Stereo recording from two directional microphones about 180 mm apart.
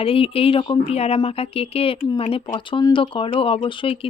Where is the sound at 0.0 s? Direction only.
30° left (ahead or behind).